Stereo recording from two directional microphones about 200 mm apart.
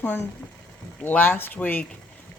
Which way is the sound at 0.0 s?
10° left (ahead or behind).